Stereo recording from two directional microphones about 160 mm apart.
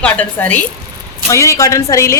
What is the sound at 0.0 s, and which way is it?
Speech, 10° left (ahead or behind).